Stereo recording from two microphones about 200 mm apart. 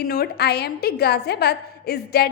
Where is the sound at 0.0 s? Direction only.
50° left (ahead or behind).